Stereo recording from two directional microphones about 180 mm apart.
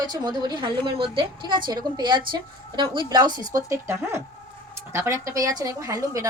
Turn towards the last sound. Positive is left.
turn(degrees=-20)  # may be behind; listen again after turning